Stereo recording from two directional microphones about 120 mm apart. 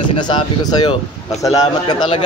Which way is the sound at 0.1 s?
40° left (ahead or behind).